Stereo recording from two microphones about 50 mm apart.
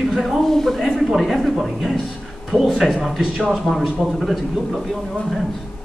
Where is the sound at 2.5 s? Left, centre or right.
Centre.